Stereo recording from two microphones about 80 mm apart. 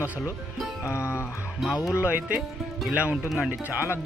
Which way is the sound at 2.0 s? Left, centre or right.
Centre.